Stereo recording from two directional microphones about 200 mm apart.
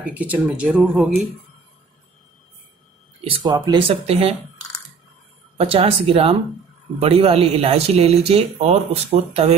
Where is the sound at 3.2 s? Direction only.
20° right (ahead or behind).